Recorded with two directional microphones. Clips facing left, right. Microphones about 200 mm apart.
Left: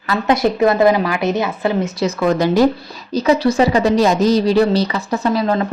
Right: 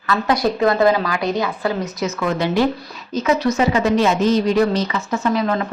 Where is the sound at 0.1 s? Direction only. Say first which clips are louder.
Left 3 dB; 25° left (ahead or behind).